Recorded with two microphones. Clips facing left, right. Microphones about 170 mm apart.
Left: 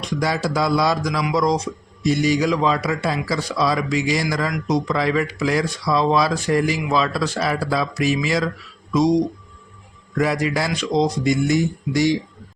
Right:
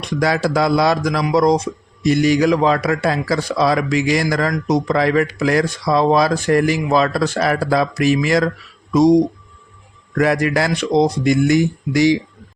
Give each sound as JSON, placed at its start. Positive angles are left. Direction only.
{"t": 0.0, "sound": "a man's voice", "side_deg": -65}
{"t": 1.7, "sound": "speech", "side_deg": -45}
{"t": 2.0, "sound": "a man's voice", "side_deg": -60}
{"t": 10.2, "sound": "a man's voice", "side_deg": -60}